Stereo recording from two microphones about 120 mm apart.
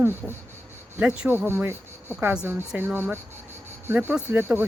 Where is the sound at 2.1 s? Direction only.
5° right (ahead or behind).